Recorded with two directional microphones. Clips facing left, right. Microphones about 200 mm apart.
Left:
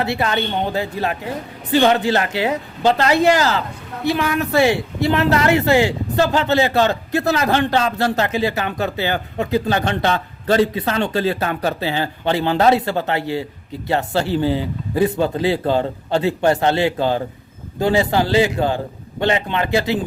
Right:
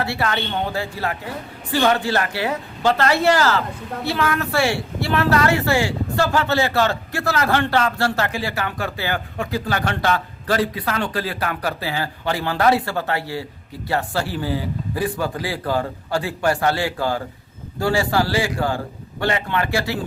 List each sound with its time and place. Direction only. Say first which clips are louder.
0.0 s speech: left 3 dB; 20° left (ahead or behind)